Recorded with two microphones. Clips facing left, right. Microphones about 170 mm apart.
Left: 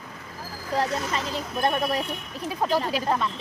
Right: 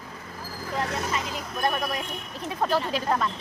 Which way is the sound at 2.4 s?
10° left (ahead or behind).